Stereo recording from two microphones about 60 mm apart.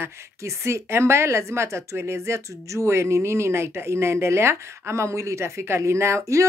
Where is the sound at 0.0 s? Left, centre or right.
Right.